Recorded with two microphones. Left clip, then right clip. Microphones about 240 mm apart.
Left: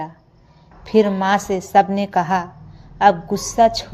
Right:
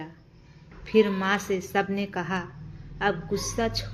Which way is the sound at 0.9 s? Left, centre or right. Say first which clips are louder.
Left 7 dB; left.